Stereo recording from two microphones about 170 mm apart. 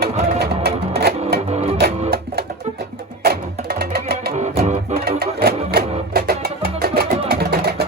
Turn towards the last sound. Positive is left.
turn(degrees=-65)  # may be behind; listen again after turning